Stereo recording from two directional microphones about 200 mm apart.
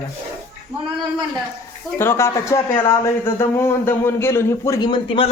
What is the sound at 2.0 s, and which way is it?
Speech, 15° left (ahead or behind).